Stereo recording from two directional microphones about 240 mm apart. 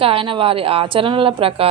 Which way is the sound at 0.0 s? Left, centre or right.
Right.